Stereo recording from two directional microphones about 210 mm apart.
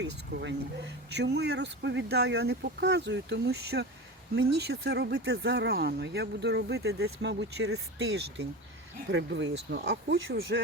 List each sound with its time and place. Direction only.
0.0 s speech: 55° right (ahead or behind)